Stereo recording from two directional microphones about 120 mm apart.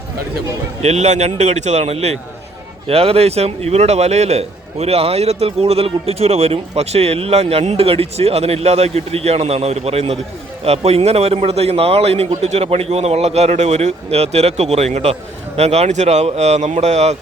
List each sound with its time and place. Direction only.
0.8 s a man's voice: 70° right (ahead or behind)